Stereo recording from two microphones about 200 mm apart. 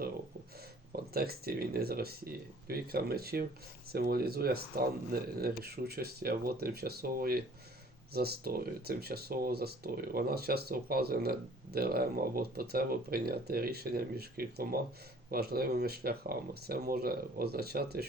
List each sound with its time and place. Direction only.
0.9 s speech: 50° right (ahead or behind)